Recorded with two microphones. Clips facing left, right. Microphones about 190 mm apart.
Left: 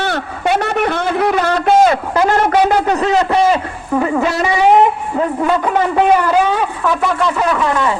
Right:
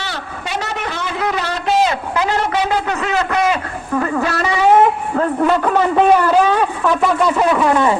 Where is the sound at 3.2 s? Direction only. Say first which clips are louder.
Left 4 dB; 25° left (ahead or behind); by 7.3 s centre (ahead or behind).